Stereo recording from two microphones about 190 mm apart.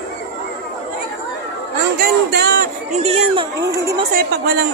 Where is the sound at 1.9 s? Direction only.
55° right (ahead or behind).